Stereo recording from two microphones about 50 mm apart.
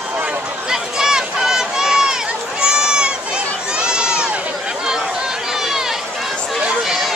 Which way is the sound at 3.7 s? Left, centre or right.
Centre.